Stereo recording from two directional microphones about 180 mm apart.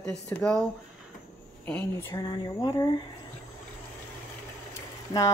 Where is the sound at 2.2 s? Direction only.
25° left (ahead or behind).